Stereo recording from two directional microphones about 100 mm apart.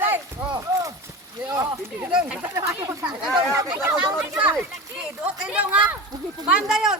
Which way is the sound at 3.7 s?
15° right (ahead or behind).